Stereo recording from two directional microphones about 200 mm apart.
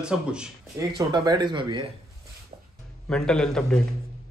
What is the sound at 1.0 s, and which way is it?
Speech, 20° right (ahead or behind).